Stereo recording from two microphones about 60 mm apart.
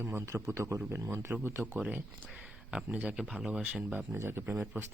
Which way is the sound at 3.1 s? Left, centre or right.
Centre.